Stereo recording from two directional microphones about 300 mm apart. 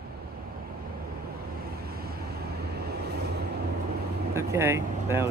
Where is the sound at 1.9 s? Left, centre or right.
Right.